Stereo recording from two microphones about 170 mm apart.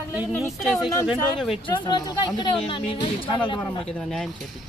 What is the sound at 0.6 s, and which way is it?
Speech, centre (ahead or behind).